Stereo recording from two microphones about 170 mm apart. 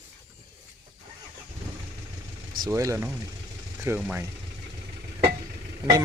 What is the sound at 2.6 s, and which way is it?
Speech, 15° right (ahead or behind).